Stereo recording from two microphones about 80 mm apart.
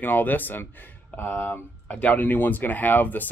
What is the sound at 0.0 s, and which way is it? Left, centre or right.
Speech, left.